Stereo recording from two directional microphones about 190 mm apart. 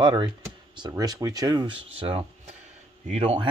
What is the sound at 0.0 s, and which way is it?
Speech, 25° right (ahead or behind).